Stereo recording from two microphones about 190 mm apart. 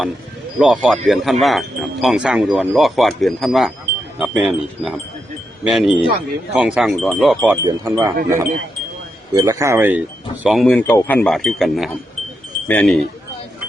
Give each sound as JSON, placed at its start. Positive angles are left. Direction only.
{"t": 0.6, "sound": "speech", "side_deg": -5}
{"t": 7.5, "sound": "speech", "side_deg": -15}
{"t": 10.4, "sound": "speech", "side_deg": 0}